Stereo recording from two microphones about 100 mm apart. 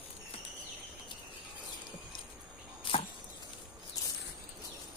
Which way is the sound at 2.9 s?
60° left (ahead or behind).